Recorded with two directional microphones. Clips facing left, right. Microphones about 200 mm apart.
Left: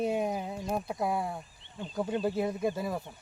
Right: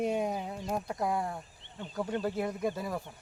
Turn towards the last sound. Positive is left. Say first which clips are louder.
# left 2 dB
turn(degrees=10)  # may be behind; listen again after turning